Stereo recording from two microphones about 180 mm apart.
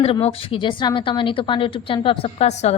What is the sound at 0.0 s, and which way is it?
Speech, 30° left (ahead or behind).